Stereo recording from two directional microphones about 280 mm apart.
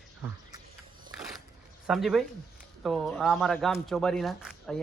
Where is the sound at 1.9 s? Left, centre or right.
Centre.